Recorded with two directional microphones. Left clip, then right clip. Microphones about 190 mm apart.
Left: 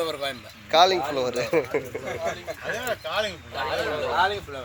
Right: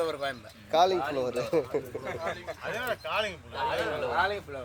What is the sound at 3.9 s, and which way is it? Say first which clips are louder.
Speech: left 5 dB; 20° right (ahead or behind).